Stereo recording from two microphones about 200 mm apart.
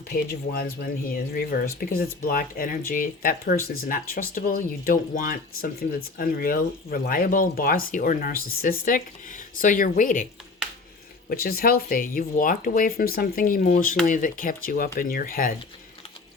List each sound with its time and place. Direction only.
0.1 s speech: 50° left (ahead or behind)
10.6 s a sound: 5° right (ahead or behind)
11.3 s speech: 45° left (ahead or behind)